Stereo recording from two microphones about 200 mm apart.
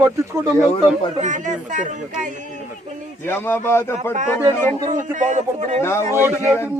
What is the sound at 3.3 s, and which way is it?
Speech, 10° left (ahead or behind).